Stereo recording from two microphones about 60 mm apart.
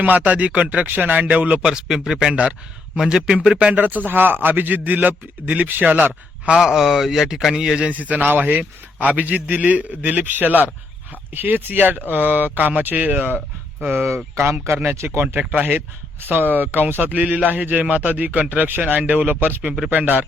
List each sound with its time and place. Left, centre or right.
0.3 s speech: right
1.6 s a man's voice: centre
2.3 s speech: right
3.0 s speech: centre; by 6.1 s right
6.6 s a man's voice: centre
7.9 s speech: right
14.3 s speech: right
15.4 s speech: right